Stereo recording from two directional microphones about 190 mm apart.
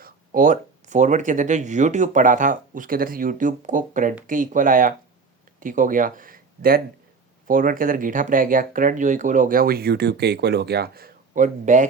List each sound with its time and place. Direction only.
0.0 s speech: 45° right (ahead or behind)